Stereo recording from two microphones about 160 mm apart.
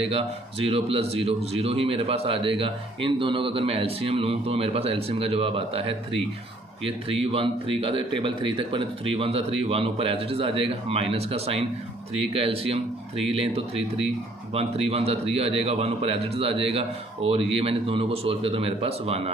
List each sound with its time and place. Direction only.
0.0 s a man's voice: 35° right (ahead or behind)